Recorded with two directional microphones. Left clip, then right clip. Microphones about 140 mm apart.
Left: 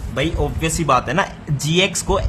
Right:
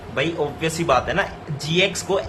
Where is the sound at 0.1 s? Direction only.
35° left (ahead or behind).